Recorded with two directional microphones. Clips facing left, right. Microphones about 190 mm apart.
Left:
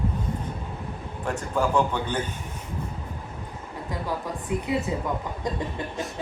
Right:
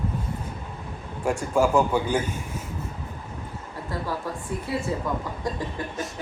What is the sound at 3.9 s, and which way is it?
A woman's voice, 15° left (ahead or behind).